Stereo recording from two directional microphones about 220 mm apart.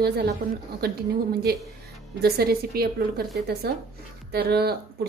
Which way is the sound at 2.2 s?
45° right (ahead or behind).